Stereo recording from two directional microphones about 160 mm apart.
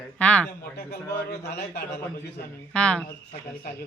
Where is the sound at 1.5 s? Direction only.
90° left.